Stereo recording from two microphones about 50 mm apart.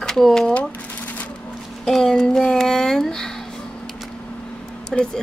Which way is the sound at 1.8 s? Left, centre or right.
Centre.